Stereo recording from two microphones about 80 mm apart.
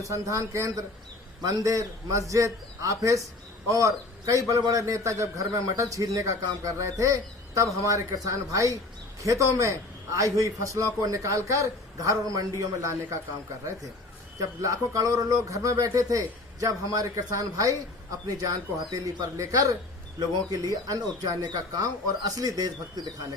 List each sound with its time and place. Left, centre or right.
0.1 s a man's voice: right
14.3 s speech: right
18.9 s speech: right
19.4 s speech: right